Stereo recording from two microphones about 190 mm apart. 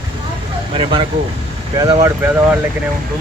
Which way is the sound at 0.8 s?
25° right (ahead or behind).